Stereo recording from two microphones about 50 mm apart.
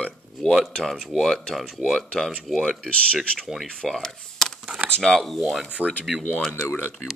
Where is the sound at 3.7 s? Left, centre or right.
Centre.